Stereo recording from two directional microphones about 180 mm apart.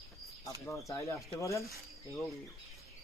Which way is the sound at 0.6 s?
15° left (ahead or behind).